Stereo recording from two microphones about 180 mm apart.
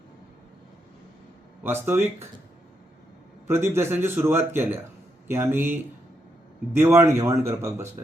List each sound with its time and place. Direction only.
1.6 s a man's voice: 10° right (ahead or behind)
3.4 s a man's voice: 15° right (ahead or behind)